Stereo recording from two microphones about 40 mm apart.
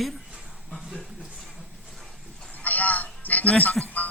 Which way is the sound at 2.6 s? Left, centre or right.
Left.